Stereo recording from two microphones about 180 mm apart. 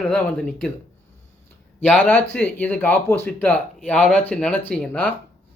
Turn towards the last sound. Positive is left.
turn(degrees=5)  # may be behind; listen again after turning